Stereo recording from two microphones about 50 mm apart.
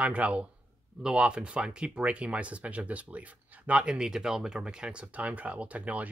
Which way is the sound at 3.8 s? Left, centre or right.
Centre.